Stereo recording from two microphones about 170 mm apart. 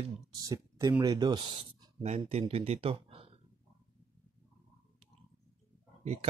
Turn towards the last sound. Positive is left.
turn(degrees=-35)  # may be behind; listen again after turning